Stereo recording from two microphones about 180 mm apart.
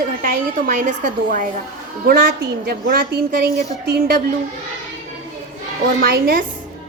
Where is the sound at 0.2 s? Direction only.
45° right (ahead or behind).